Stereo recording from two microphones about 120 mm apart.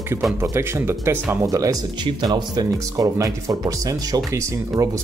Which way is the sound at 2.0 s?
35° right (ahead or behind).